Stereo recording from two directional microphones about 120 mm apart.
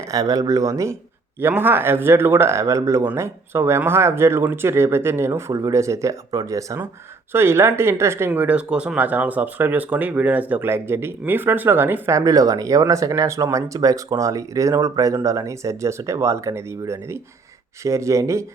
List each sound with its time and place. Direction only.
0.1 s speech: 30° right (ahead or behind)
8.3 s speech: 10° right (ahead or behind)